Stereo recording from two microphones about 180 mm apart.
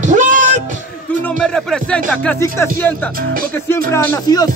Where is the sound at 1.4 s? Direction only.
5° left (ahead or behind).